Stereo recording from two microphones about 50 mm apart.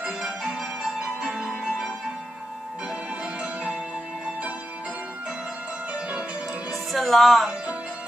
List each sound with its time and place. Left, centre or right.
0.0 s music: centre
5.9 s music: right
6.7 s music: centre